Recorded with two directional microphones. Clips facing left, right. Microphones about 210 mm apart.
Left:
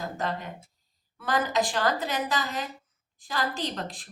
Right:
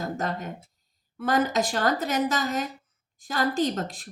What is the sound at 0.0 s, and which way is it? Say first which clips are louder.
A woman's voice: right 2 dB; 45° right (ahead or behind).